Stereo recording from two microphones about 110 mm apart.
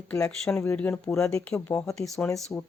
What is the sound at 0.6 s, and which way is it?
Speech, 15° left (ahead or behind).